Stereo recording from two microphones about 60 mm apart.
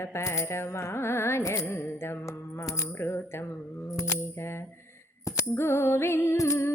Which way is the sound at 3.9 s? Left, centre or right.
Left.